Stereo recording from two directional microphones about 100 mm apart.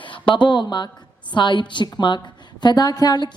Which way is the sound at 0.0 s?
55° left (ahead or behind).